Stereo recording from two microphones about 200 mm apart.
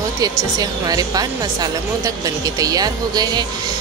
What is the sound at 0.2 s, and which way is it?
A woman's voice, 20° right (ahead or behind).